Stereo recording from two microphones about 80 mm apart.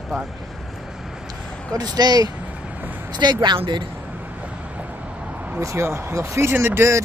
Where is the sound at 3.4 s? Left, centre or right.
Right.